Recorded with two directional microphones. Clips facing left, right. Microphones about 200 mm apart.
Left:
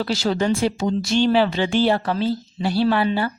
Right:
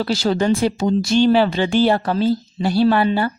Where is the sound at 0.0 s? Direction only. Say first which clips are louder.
Right 3 dB; 35° right (ahead or behind).